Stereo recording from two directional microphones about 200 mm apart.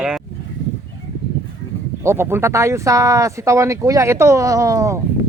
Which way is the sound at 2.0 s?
10° right (ahead or behind).